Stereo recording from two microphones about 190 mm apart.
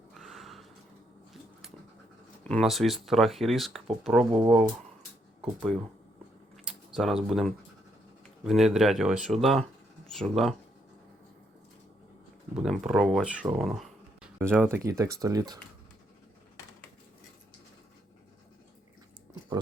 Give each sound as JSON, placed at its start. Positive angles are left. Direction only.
{"t": 0.1, "sound": "a sound", "side_deg": 0}
{"t": 2.4, "sound": "speech", "side_deg": 5}
{"t": 6.7, "sound": "speech", "side_deg": -5}
{"t": 12.5, "sound": "speech", "side_deg": 0}
{"t": 14.6, "sound": "speech", "side_deg": -15}